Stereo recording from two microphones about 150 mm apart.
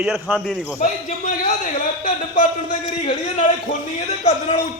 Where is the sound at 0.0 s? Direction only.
5° right (ahead or behind).